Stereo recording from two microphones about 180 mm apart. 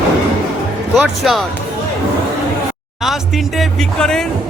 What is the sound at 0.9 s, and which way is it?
Speech, centre (ahead or behind).